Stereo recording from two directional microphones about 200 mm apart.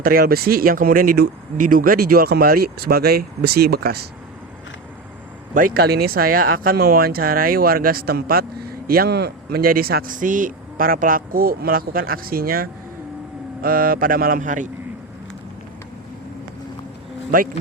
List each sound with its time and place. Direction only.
0.0 s speech: 50° right (ahead or behind)
5.5 s speech: 45° right (ahead or behind)
17.3 s speech: 45° right (ahead or behind)